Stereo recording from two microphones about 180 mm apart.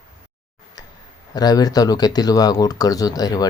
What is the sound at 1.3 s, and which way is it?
Speech, 20° left (ahead or behind).